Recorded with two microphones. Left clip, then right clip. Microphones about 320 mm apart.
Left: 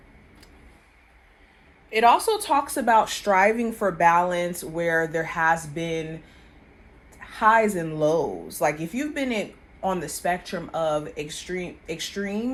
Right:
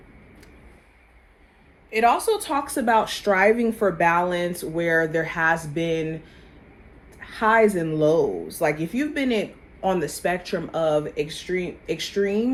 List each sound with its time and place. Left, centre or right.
1.9 s speech: left
7.2 s speech: left
9.9 s speech: centre